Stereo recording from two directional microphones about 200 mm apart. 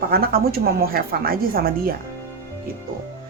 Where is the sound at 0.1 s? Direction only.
50° right (ahead or behind).